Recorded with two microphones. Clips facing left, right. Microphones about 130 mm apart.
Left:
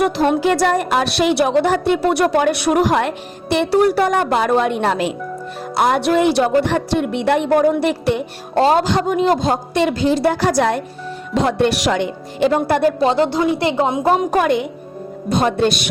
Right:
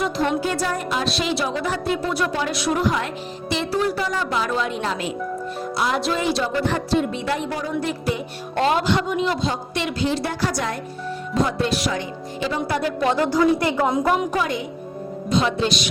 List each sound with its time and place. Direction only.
0.0 s a woman's voice: 60° left (ahead or behind)
5.7 s a woman's voice: 55° left (ahead or behind)
6.6 s a woman's voice: 75° left (ahead or behind)
8.5 s a woman's voice: 35° left (ahead or behind)
10.4 s speech: 85° left
11.4 s a woman's voice: 70° left (ahead or behind); by 12.9 s 55° left (ahead or behind)
13.0 s a woman's voice: 25° left (ahead or behind)
14.3 s a woman's voice: 65° left (ahead or behind)
15.3 s a woman's voice: 55° left (ahead or behind)